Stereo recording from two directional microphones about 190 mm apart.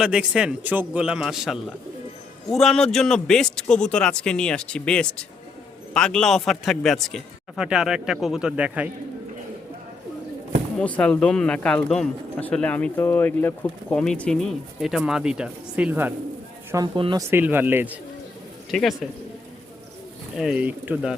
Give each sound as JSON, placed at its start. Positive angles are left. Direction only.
{"t": 0.0, "sound": "speech", "side_deg": -5}
{"t": 10.8, "sound": "speech", "side_deg": 5}
{"t": 16.7, "sound": "speech", "side_deg": -25}
{"t": 17.3, "sound": "speech", "side_deg": -10}
{"t": 18.7, "sound": "speech", "side_deg": 0}
{"t": 20.3, "sound": "speech", "side_deg": -5}